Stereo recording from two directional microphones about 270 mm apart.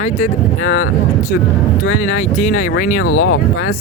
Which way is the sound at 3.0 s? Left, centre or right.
Left.